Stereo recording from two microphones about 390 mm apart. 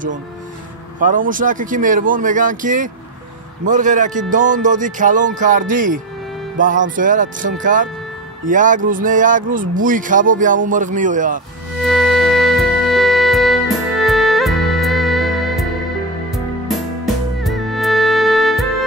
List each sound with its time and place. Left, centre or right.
0.9 s speech: centre
11.8 s music: centre